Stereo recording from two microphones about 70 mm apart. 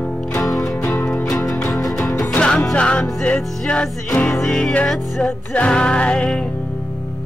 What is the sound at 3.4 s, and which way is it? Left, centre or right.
Music, centre.